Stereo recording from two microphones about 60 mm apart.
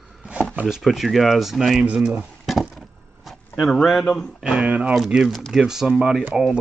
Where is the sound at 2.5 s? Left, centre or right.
Centre.